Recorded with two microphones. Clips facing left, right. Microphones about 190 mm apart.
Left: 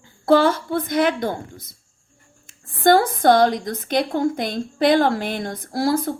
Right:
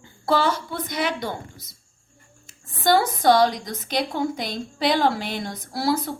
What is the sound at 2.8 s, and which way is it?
Speech, 55° left (ahead or behind).